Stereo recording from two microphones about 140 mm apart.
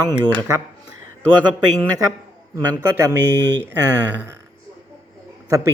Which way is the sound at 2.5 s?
30° right (ahead or behind).